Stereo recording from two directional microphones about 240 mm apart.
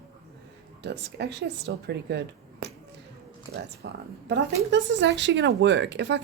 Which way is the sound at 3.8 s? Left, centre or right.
Right.